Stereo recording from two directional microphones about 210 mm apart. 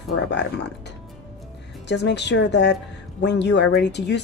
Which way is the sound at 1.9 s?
55° left (ahead or behind).